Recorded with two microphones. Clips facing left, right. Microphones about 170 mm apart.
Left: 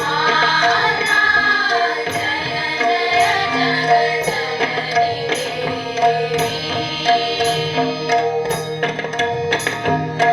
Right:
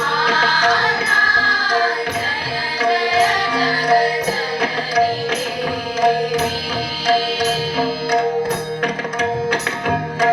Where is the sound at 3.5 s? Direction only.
25° left (ahead or behind).